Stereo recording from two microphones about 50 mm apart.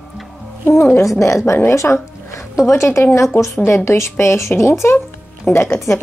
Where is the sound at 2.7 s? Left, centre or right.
Left.